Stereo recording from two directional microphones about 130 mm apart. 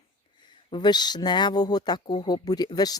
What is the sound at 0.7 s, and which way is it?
Speech, 35° left (ahead or behind).